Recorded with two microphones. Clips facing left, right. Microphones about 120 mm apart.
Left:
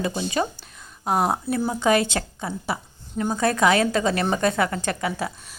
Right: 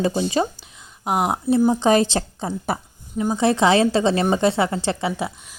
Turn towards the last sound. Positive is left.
turn(degrees=-25)  # may be behind; listen again after turning